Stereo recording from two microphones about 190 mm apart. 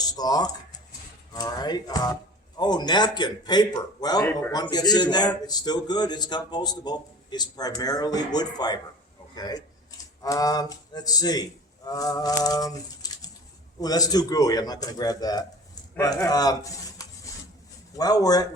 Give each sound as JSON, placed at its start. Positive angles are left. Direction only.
{"t": 0.0, "sound": "a sound", "side_deg": 20}
{"t": 1.3, "sound": "a man's voice", "side_deg": 20}
{"t": 11.9, "sound": "bird", "side_deg": 20}
{"t": 13.8, "sound": "a man's voice", "side_deg": 20}
{"t": 17.9, "sound": "a man's voice", "side_deg": 20}